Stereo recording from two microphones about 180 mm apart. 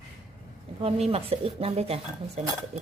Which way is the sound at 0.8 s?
35° right (ahead or behind).